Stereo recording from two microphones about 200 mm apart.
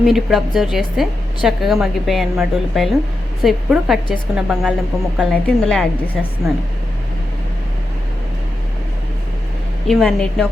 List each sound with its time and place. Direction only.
0.0 s a woman's voice: centre (ahead or behind)
9.8 s a woman's voice: centre (ahead or behind)